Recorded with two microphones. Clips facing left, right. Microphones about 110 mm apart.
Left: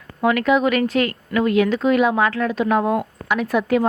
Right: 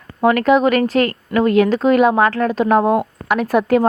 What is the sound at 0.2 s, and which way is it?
A woman's voice, 40° right (ahead or behind).